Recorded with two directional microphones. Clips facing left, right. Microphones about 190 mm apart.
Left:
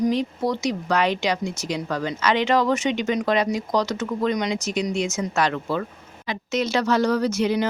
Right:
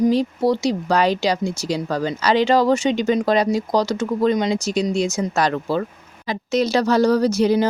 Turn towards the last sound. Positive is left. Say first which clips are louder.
# right 5 dB
turn(degrees=-35)  # may be behind; listen again after turning